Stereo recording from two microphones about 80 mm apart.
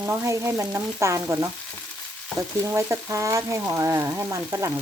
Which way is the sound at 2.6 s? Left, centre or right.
Right.